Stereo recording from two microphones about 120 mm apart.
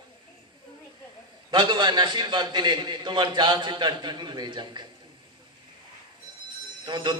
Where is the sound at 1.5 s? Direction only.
40° right (ahead or behind).